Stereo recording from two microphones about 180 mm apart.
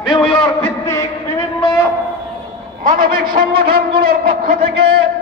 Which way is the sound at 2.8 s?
50° right (ahead or behind).